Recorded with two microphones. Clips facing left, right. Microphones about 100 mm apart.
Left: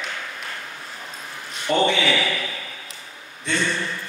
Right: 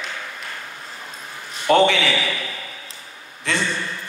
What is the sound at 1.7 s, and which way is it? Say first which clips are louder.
Speech: right 6 dB; 80° right.